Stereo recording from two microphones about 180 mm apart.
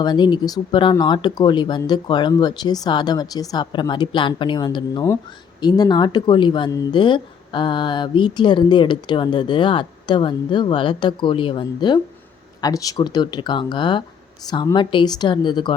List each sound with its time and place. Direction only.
0.0 s speech: 25° left (ahead or behind)